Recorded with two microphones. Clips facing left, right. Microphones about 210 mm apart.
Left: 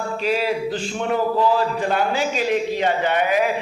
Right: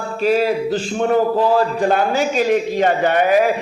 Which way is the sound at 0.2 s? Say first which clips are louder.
Right 6 dB; 45° right (ahead or behind).